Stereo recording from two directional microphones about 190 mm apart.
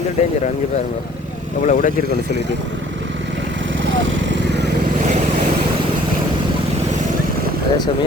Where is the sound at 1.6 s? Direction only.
45° left (ahead or behind).